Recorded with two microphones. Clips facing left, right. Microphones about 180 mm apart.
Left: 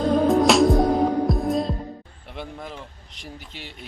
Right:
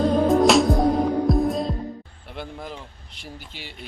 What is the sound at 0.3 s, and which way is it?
Music, centre (ahead or behind).